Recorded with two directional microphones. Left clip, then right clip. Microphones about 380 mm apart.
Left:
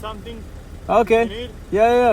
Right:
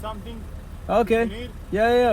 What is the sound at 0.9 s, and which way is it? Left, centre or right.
Speech, centre.